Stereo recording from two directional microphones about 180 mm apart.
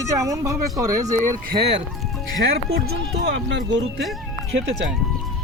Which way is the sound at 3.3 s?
90° right.